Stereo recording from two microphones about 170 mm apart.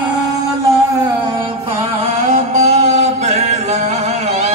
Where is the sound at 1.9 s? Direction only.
40° right (ahead or behind).